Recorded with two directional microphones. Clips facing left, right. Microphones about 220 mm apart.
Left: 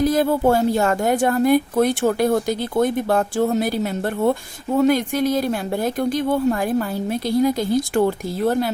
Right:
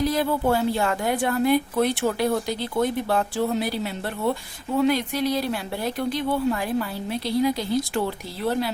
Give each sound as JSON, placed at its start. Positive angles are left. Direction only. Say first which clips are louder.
{"t": 0.0, "sound": "a woman's voice", "louder": "left 5 dB", "side_deg": 45}